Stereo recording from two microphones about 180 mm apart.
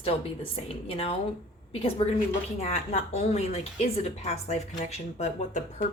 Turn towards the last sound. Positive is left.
turn(degrees=40)  # may be behind; listen again after turning